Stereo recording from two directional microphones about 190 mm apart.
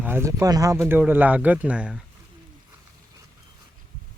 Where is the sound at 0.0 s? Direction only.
10° right (ahead or behind).